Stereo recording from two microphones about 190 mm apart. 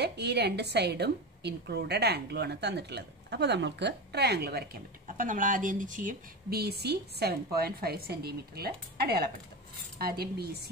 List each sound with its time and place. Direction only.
0.0 s a woman's voice: 60° right (ahead or behind)